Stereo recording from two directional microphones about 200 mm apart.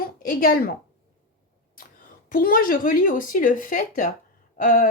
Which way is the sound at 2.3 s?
45° left (ahead or behind).